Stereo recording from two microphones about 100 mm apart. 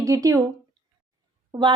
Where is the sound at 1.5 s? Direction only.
50° right (ahead or behind).